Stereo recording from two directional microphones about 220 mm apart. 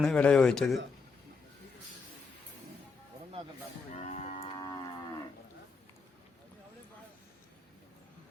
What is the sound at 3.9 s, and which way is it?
Livestock, 30° left (ahead or behind).